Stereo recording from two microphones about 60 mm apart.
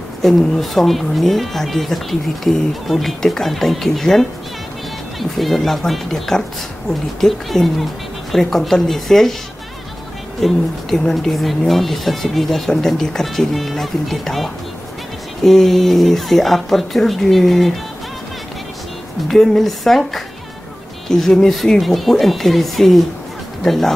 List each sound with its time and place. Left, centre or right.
0.2 s speech: centre
5.4 s speech: centre
10.4 s speech: centre
19.2 s speech: centre